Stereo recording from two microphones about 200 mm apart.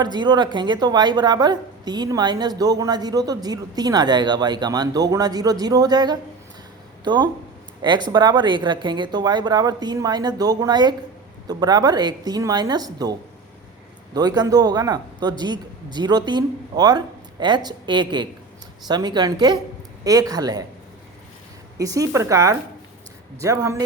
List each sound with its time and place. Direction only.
0.0 s a woman's voice: 20° right (ahead or behind)
21.8 s speech: 15° right (ahead or behind)